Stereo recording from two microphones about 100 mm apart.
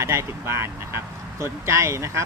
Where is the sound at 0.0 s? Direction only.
30° right (ahead or behind).